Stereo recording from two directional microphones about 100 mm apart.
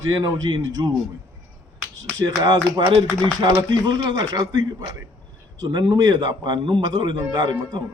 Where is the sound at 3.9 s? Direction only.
40° right (ahead or behind).